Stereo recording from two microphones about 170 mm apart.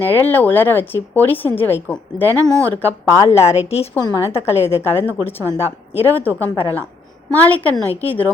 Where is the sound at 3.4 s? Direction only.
40° left (ahead or behind).